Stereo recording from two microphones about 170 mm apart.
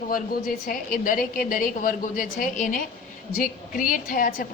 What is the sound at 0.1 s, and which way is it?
A woman's voice, 55° left (ahead or behind).